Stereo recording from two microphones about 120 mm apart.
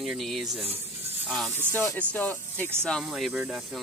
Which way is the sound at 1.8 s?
10° left (ahead or behind).